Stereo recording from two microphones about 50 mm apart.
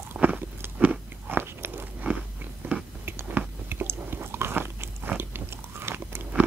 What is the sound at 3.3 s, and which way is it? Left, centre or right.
Chewing, right.